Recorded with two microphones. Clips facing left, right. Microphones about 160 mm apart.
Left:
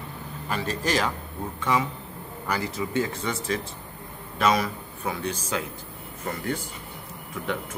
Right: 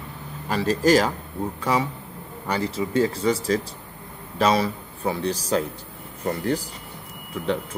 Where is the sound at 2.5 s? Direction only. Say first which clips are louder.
Right 3 dB; 30° right (ahead or behind).